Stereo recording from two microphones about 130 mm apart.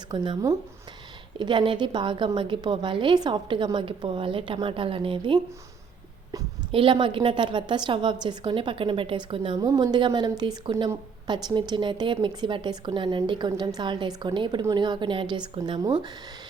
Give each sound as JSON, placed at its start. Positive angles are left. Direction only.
{"t": 0.1, "sound": "a woman's voice", "side_deg": -40}
{"t": 1.4, "sound": "a woman's voice", "side_deg": -40}
{"t": 6.7, "sound": "a woman's voice", "side_deg": -40}
{"t": 9.6, "sound": "a woman's voice", "side_deg": -30}